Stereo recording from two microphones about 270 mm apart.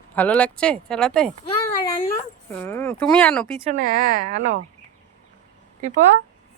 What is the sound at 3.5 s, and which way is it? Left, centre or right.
A woman's voice, right.